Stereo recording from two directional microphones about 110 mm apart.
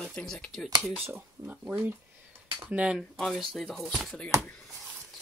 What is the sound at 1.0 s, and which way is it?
Speech, 15° right (ahead or behind).